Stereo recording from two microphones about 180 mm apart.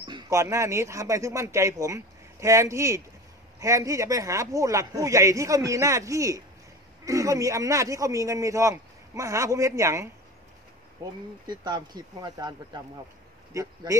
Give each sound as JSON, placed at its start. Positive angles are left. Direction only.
{"t": 0.0, "sound": "speech", "side_deg": -20}
{"t": 11.4, "sound": "speech", "side_deg": -25}